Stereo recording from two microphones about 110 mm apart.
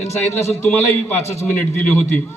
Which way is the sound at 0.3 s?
20° left (ahead or behind).